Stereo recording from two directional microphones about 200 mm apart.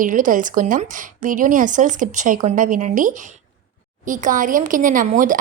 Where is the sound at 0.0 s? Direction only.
40° right (ahead or behind).